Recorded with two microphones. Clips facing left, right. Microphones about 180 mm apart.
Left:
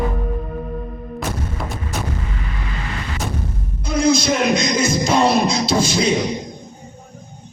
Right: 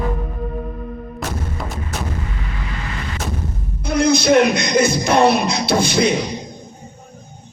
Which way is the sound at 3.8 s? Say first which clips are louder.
Right 1 dB; 60° right (ahead or behind).